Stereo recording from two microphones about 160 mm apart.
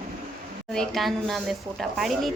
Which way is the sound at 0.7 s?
Centre (ahead or behind).